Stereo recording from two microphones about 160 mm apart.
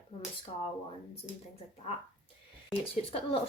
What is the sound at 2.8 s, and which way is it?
Speech, 35° left (ahead or behind).